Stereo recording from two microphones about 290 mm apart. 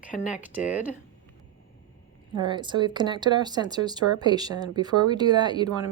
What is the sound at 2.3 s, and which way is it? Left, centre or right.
Speech, centre.